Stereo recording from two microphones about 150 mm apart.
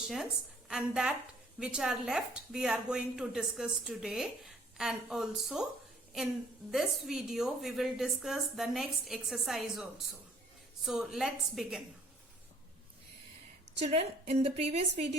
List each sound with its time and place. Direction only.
0.0 s a woman's voice: centre (ahead or behind)
6.7 s a woman's voice: centre (ahead or behind)
13.9 s a woman's voice: 45° right (ahead or behind)